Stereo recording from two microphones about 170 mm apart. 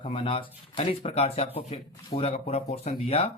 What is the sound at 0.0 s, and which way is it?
Speech, 30° left (ahead or behind).